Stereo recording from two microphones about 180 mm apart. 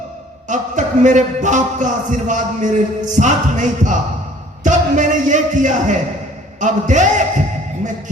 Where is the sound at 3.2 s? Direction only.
45° right (ahead or behind).